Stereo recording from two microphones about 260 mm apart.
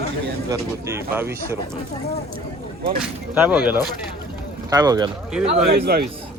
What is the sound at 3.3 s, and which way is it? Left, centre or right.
Speech, centre.